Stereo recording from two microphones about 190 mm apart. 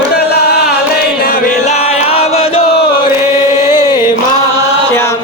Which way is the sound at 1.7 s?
35° left (ahead or behind).